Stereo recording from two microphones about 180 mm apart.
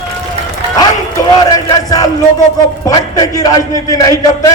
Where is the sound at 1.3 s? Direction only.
25° left (ahead or behind).